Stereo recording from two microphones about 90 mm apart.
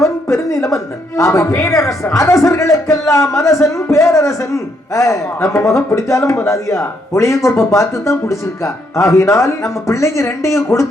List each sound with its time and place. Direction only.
0.0 s speech: 35° left (ahead or behind)